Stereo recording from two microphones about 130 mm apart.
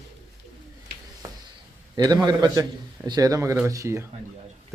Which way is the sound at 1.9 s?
30° right (ahead or behind).